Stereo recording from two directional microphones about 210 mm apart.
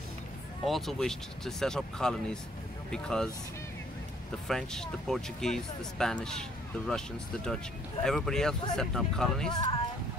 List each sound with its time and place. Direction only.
0.7 s speech: centre (ahead or behind)
4.5 s speech: centre (ahead or behind)
7.4 s speech: 5° left (ahead or behind)
9.5 s speech: 20° left (ahead or behind)